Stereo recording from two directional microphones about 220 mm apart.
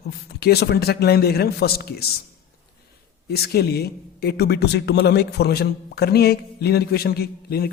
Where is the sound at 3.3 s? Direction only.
45° left (ahead or behind).